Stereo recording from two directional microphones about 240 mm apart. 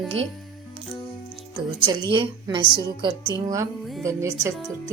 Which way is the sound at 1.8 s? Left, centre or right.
Right.